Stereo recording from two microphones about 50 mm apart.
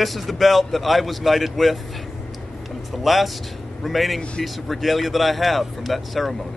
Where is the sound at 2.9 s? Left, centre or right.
Centre.